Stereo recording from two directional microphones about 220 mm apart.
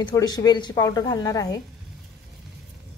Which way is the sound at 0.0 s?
15° left (ahead or behind).